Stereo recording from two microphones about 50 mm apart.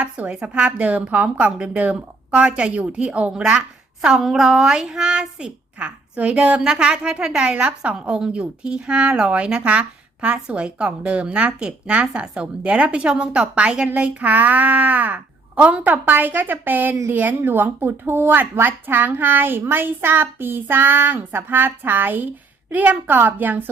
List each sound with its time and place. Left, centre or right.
0.0 s speech: right
4.0 s child singing: centre
5.8 s speech: right